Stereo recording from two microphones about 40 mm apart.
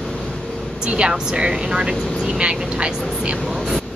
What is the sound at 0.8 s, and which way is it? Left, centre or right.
Speech, right.